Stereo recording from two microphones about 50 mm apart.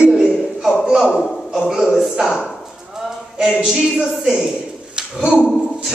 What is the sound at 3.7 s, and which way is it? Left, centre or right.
Speech, centre.